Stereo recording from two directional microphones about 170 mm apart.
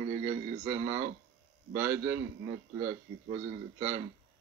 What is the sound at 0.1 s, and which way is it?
Radio, 40° right (ahead or behind).